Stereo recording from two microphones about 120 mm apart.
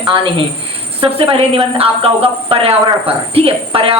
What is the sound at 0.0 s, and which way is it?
A woman's voice, 40° right (ahead or behind).